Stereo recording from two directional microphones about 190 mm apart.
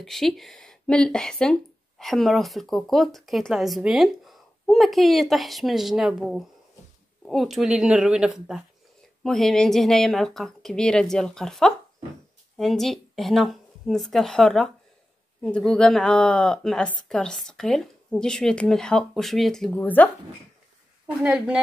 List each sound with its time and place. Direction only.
0.0 s speech: centre (ahead or behind)
21.2 s speech: 5° right (ahead or behind)